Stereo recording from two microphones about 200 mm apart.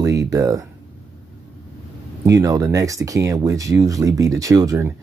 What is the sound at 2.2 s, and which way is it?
Speech, 15° right (ahead or behind).